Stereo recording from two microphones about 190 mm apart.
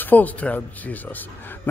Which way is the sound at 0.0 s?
10° left (ahead or behind).